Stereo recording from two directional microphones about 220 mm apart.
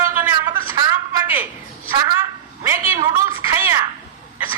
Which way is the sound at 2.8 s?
15° right (ahead or behind).